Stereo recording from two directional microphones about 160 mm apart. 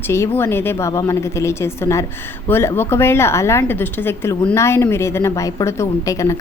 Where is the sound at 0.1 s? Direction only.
15° left (ahead or behind).